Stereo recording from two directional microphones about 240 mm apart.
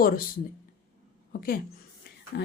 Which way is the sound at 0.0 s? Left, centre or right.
Left.